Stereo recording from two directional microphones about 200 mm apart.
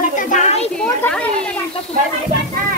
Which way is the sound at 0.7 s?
5° left (ahead or behind).